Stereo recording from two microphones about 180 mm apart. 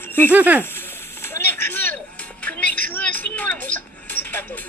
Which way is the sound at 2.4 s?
10° left (ahead or behind).